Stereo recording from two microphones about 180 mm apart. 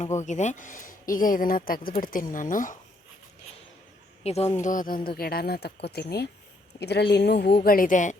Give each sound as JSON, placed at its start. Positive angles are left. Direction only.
{"t": 0.2, "sound": "speech", "side_deg": 40}
{"t": 4.2, "sound": "speech", "side_deg": 35}
{"t": 4.6, "sound": "speech", "side_deg": 45}
{"t": 7.6, "sound": "speech", "side_deg": 50}